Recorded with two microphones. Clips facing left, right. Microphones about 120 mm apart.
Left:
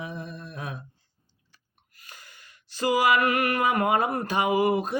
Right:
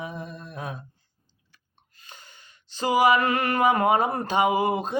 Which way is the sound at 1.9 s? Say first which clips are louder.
Right 1 dB; 25° right (ahead or behind).